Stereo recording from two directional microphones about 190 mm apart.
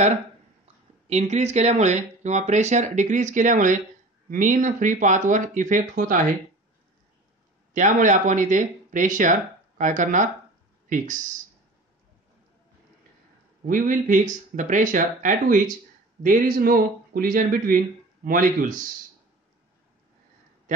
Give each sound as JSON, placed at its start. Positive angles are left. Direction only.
{"t": 1.0, "sound": "a man's voice", "side_deg": -35}
{"t": 7.7, "sound": "a man's voice", "side_deg": -40}
{"t": 13.7, "sound": "a man's voice", "side_deg": -45}